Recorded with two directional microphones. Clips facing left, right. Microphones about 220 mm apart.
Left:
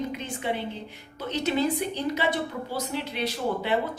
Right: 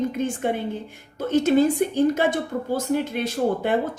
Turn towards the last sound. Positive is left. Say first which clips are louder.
# right 5 dB
turn(degrees=-50)  # may be behind; listen again after turning